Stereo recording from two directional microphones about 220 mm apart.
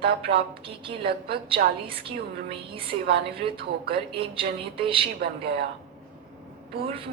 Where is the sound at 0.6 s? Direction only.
25° right (ahead or behind).